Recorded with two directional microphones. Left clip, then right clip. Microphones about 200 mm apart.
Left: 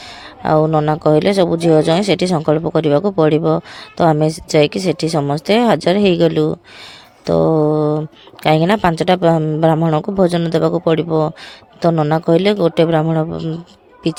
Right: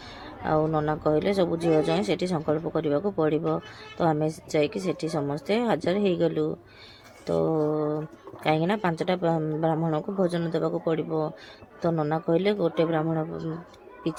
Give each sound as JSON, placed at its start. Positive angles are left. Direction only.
{"t": 0.4, "sound": "speech", "side_deg": 45}